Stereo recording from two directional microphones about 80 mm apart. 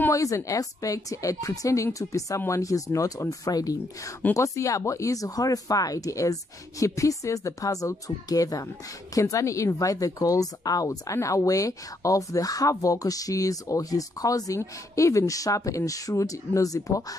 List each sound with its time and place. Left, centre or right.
0.1 s speech: left